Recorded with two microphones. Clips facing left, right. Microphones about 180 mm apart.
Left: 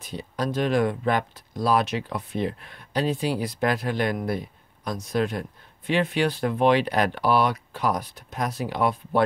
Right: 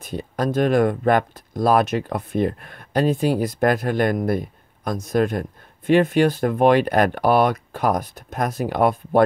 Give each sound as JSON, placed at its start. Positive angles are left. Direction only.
{"t": 0.0, "sound": "speech", "side_deg": -50}